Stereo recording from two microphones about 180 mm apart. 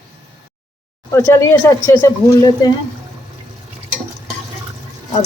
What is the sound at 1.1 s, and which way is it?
Speech, 15° left (ahead or behind).